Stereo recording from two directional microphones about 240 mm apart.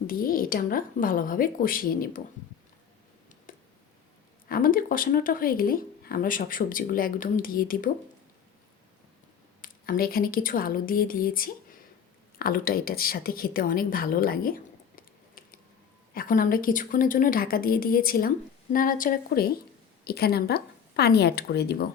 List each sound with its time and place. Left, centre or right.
0.1 s speech: left
3.5 s a sound: left
4.4 s speech: left
9.6 s a woman's voice: left